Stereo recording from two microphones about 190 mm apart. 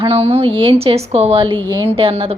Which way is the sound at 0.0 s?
30° right (ahead or behind).